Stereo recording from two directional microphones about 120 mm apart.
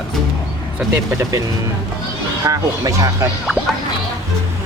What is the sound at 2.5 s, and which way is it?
Speech, 25° right (ahead or behind).